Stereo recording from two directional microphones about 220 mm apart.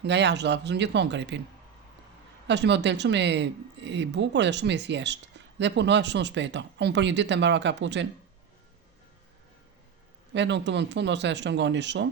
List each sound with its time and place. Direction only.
0.0 s speech: 50° right (ahead or behind)
2.5 s speech: 50° right (ahead or behind)
10.3 s speech: 55° right (ahead or behind)